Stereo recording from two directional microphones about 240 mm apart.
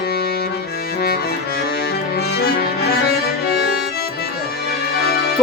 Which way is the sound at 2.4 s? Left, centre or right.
Left.